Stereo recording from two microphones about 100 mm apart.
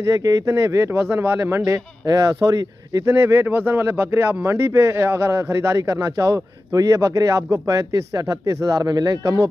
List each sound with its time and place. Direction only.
0.0 s speech: 35° right (ahead or behind)
3.2 s speech: 25° right (ahead or behind)